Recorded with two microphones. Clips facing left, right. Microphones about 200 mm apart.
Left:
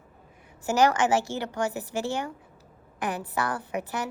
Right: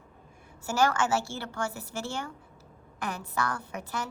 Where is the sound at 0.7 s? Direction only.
15° left (ahead or behind).